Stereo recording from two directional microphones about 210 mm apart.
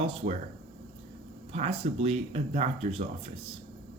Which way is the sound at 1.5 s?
30° right (ahead or behind).